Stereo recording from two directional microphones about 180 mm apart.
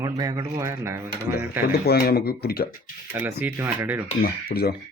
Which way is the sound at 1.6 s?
60° left (ahead or behind).